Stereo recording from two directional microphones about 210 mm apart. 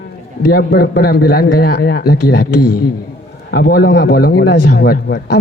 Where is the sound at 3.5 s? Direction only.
45° left (ahead or behind).